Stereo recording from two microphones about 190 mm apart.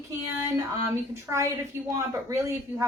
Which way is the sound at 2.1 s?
15° right (ahead or behind).